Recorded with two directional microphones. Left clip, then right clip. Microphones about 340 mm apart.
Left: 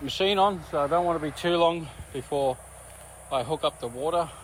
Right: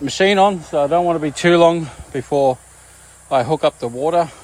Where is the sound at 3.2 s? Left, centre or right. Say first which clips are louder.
Right 11 dB; right.